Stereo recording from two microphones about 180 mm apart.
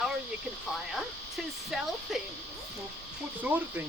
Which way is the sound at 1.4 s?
Centre (ahead or behind).